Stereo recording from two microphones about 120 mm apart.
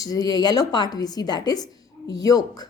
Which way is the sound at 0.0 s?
30° left (ahead or behind).